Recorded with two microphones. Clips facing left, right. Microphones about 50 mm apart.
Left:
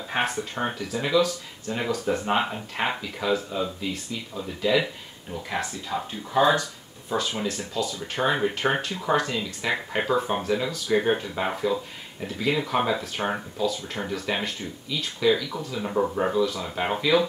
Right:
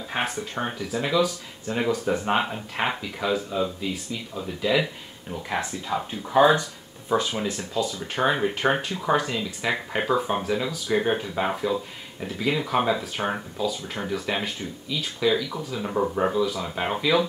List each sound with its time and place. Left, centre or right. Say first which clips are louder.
0.1 s speech: left 1 dB; centre
5.9 s speech: right 3 dB; centre